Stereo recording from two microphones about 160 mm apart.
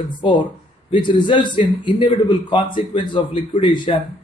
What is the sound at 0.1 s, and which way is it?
A man's voice, 30° left (ahead or behind).